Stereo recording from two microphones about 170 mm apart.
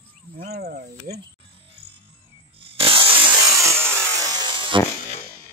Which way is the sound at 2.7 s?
30° right (ahead or behind).